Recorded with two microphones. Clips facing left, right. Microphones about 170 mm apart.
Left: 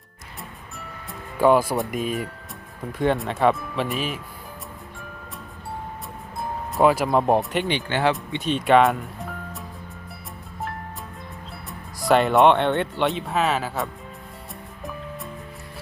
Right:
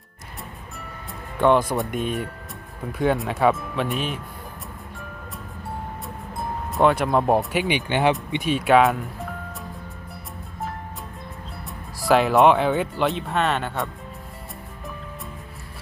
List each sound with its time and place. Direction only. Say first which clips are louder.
1.4 s speech: left 1 dB; 5° left (ahead or behind)
6.7 s speech: even; centre (ahead or behind)
7.7 s speech: right 3 dB; 15° right (ahead or behind); by 9.0 s centre (ahead or behind)
11.9 s speech: even; centre (ahead or behind)